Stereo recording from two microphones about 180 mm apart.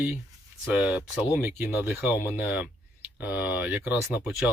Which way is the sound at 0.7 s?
10° right (ahead or behind).